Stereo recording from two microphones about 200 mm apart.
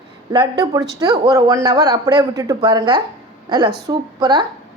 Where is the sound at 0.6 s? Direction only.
15° right (ahead or behind).